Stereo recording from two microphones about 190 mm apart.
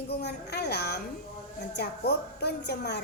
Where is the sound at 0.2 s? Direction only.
60° left (ahead or behind).